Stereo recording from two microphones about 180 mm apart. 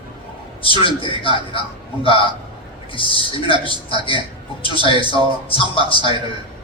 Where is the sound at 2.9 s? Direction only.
30° left (ahead or behind).